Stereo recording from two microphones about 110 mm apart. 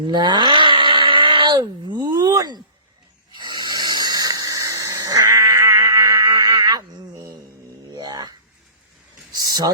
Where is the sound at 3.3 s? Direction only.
40° right (ahead or behind).